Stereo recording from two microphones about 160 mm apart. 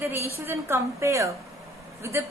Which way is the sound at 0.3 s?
15° right (ahead or behind).